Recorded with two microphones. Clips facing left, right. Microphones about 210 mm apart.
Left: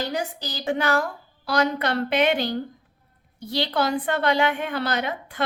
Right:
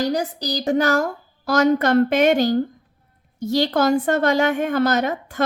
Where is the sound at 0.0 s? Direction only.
40° right (ahead or behind).